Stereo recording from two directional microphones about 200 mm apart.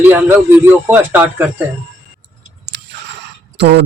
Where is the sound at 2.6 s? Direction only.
60° right (ahead or behind).